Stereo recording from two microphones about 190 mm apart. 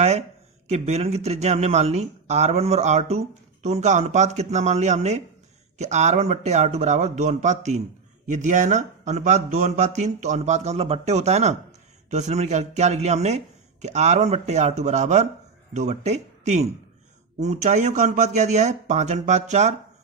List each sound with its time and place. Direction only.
0.0 s speech: 35° right (ahead or behind)